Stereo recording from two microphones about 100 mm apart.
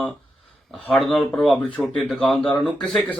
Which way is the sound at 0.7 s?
Centre (ahead or behind).